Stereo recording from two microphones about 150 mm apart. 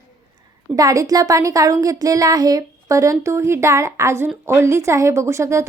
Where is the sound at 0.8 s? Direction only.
25° right (ahead or behind).